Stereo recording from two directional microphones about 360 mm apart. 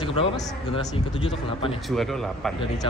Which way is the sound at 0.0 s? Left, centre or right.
Centre.